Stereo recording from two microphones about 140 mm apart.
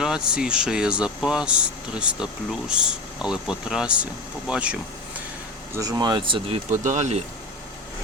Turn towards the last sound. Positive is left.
turn(degrees=-60)  # may be behind; listen again after turning